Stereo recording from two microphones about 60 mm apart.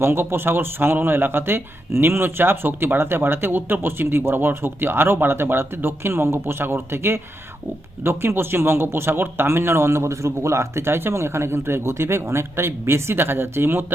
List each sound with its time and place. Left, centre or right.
0.0 s speech: right